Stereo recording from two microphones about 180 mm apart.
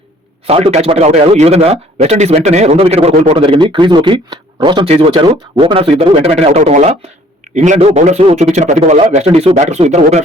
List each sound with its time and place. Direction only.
0.4 s a man's voice: 35° right (ahead or behind)